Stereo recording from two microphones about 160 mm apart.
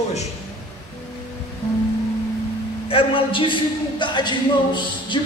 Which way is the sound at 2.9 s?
35° left (ahead or behind).